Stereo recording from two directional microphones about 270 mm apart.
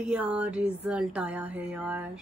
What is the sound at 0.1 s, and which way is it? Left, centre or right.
Speech, centre.